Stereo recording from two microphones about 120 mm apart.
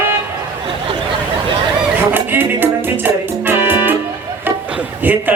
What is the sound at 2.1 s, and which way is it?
Music, 15° right (ahead or behind).